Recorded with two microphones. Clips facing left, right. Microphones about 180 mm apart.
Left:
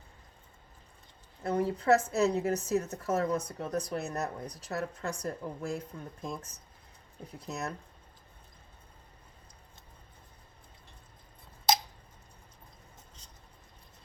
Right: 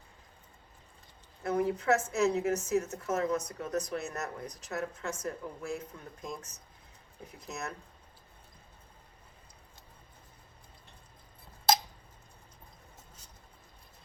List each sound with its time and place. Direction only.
1.5 s speech: 35° left (ahead or behind)